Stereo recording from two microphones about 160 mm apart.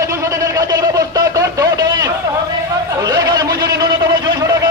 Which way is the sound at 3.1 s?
25° right (ahead or behind).